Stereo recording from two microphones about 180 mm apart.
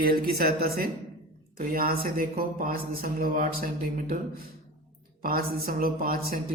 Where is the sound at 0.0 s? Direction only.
55° right (ahead or behind).